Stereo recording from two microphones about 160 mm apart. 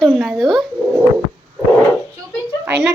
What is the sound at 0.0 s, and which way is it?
Speech, centre (ahead or behind).